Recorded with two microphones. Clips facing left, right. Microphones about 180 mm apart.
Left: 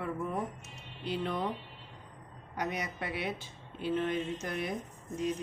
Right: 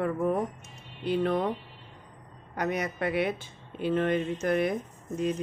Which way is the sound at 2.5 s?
55° right (ahead or behind).